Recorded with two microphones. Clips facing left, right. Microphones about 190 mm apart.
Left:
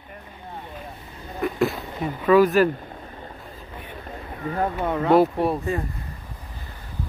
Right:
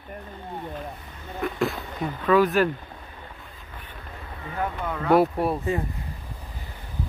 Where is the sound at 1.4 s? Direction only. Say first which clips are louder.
Left 3 dB; centre (ahead or behind).